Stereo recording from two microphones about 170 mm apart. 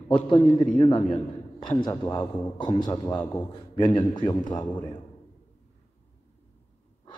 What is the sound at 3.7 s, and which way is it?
Speech, 25° left (ahead or behind).